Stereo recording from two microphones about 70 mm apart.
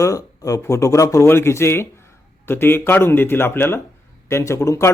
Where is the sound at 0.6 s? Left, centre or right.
Left.